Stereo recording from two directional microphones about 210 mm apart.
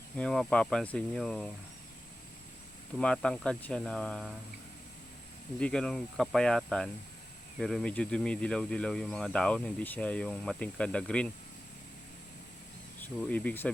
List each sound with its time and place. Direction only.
0.2 s speech: 5° left (ahead or behind)
3.0 s speech: 5° left (ahead or behind)
5.5 s speech: 5° left (ahead or behind)
13.0 s speech: 5° left (ahead or behind)